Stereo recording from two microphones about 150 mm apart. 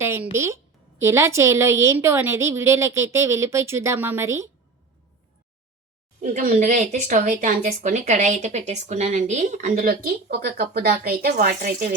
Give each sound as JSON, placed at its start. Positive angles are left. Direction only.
{"t": 0.0, "sound": "a woman's voice", "side_deg": -15}
{"t": 6.3, "sound": "speech", "side_deg": -55}
{"t": 9.8, "sound": "a woman's voice", "side_deg": -90}